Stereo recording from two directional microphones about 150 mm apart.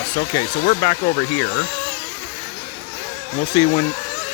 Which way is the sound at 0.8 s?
35° left (ahead or behind).